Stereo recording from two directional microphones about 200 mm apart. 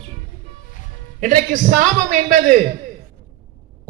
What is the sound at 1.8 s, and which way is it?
Speech, 40° right (ahead or behind).